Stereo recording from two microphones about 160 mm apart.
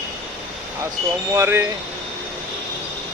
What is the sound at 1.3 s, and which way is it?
Speech, 15° right (ahead or behind).